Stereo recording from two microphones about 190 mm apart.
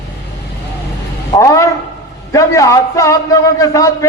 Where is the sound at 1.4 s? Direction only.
15° left (ahead or behind).